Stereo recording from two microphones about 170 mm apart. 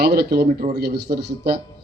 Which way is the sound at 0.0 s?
65° right (ahead or behind).